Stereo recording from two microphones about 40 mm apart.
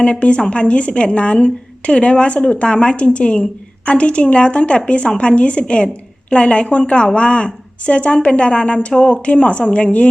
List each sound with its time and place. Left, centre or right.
0.0 s a woman's voice: left